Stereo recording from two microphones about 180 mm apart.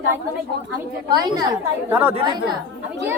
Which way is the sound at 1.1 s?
25° right (ahead or behind).